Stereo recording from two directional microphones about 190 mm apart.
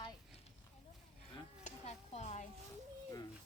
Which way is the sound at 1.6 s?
35° left (ahead or behind).